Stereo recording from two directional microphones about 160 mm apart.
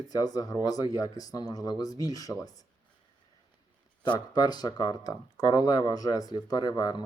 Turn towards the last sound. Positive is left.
turn(degrees=25)  # may be behind; listen again after turning